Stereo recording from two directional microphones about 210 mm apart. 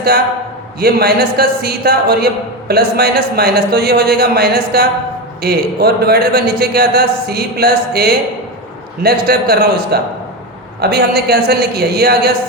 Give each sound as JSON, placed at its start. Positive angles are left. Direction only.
{"t": 0.8, "sound": "a man's voice", "side_deg": -50}